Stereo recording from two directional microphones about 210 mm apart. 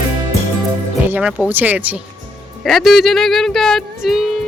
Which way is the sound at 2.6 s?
Centre (ahead or behind).